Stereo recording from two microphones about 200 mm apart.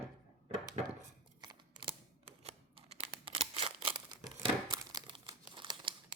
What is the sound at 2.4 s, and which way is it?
Scissors, 25° right (ahead or behind).